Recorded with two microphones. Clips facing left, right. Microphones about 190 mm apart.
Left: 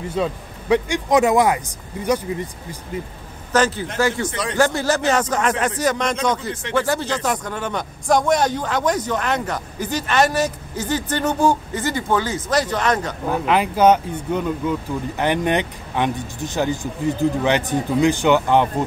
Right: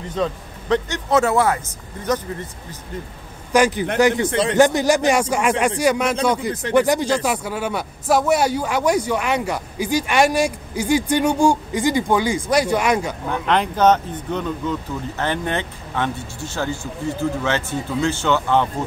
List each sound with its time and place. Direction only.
0.1 s speech: 10° left (ahead or behind)
3.5 s a man's voice: 10° right (ahead or behind)
13.3 s speech: 5° left (ahead or behind)